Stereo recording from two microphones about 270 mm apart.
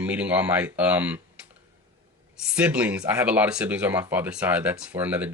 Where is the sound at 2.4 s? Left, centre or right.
Centre.